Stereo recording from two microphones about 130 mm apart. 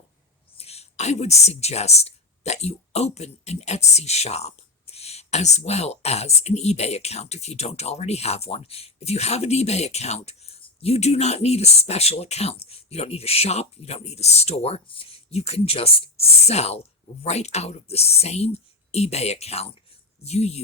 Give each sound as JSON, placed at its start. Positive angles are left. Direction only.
{"t": 0.5, "sound": "speech", "side_deg": 50}